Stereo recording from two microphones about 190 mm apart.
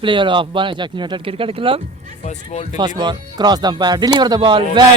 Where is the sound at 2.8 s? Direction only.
20° right (ahead or behind).